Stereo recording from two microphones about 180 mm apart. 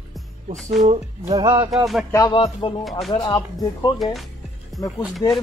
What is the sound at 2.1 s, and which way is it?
Speech, 20° left (ahead or behind).